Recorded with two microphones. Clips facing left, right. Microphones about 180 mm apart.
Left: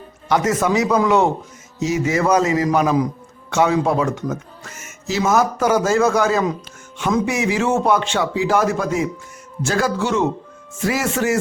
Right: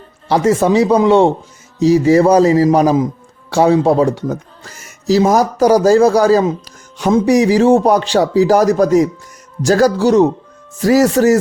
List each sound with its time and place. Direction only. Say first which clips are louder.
0.3 s speech: right 6 dB; 30° right (ahead or behind)